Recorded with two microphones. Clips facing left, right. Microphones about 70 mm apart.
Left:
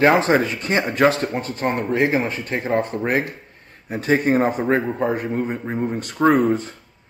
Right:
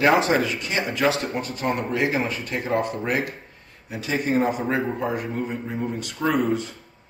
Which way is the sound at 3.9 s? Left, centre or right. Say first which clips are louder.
Left 6 dB; left.